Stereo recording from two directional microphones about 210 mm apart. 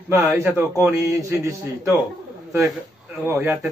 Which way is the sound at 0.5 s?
15° right (ahead or behind).